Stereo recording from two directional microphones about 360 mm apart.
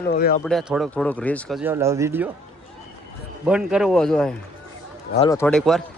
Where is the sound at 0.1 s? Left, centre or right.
Left.